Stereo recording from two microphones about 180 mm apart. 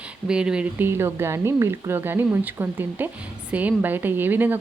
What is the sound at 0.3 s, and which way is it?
Speech, 5° right (ahead or behind).